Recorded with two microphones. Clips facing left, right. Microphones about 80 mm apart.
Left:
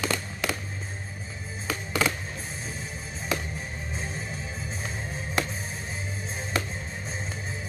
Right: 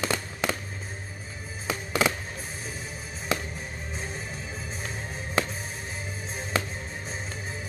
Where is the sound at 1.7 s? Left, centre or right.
Centre.